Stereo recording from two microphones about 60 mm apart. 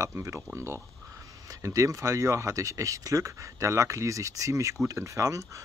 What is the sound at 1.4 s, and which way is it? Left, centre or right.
Speech, right.